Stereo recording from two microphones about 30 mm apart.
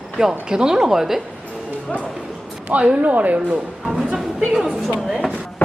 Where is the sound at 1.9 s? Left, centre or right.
Left.